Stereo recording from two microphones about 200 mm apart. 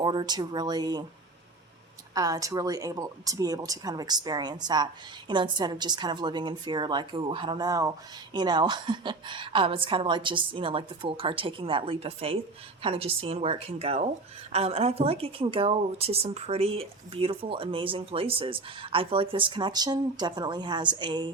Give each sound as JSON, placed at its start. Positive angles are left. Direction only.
{"t": 0.0, "sound": "a woman's voice", "side_deg": -20}
{"t": 2.1, "sound": "a woman's voice", "side_deg": -20}